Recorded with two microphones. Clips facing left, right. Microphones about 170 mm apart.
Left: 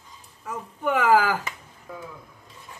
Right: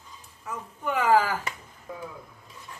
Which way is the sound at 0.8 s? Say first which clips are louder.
Left 2 dB; 80° left.